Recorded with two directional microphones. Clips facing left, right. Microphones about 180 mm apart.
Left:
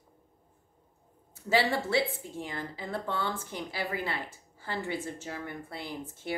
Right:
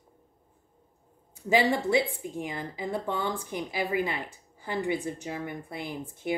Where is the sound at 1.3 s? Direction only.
15° right (ahead or behind).